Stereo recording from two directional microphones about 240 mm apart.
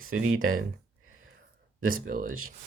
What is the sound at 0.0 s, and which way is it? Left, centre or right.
Speech, right.